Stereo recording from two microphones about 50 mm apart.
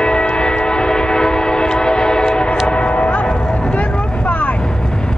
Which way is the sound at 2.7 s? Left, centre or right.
Left.